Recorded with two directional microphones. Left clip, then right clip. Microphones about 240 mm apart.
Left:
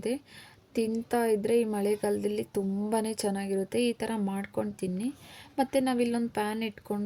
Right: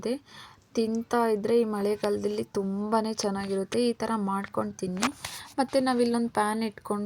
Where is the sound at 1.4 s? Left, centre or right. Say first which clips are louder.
Right 2 dB; centre.